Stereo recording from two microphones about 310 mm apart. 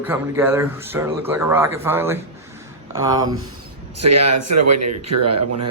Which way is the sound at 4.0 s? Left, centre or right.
Right.